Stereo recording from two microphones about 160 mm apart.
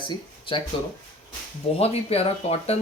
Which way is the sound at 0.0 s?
30° left (ahead or behind).